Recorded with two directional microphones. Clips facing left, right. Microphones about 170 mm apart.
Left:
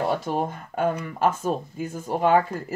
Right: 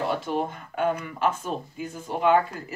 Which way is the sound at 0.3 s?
45° left (ahead or behind).